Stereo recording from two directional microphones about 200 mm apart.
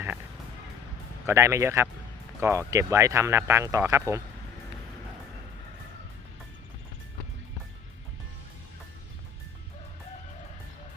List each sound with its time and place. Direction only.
1.3 s speech: 15° right (ahead or behind)